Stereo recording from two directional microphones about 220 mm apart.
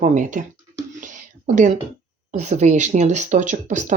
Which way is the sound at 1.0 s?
35° right (ahead or behind).